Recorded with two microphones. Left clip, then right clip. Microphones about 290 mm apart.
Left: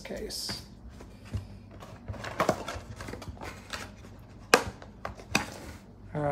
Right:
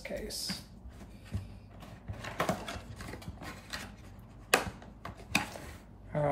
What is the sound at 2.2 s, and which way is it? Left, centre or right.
Mechanisms, left.